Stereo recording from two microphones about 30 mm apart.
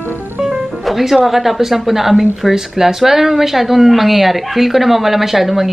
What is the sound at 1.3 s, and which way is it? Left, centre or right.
Speech, centre.